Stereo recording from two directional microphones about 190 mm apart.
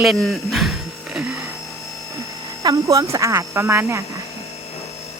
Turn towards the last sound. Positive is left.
turn(degrees=-15)  # may be behind; listen again after turning